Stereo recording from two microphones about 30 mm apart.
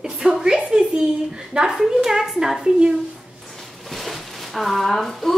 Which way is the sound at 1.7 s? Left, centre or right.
Centre.